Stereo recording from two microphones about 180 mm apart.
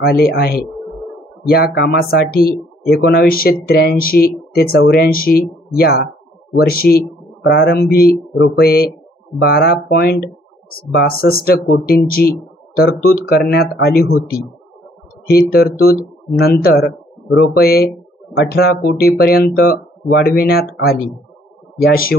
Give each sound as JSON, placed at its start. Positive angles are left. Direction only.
{"t": 0.0, "sound": "speech", "side_deg": 60}
{"t": 7.4, "sound": "speech", "side_deg": 65}